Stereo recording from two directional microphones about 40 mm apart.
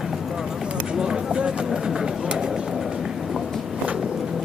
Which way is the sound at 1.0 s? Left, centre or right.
Right.